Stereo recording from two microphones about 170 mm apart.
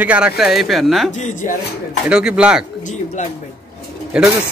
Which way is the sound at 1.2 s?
45° left (ahead or behind).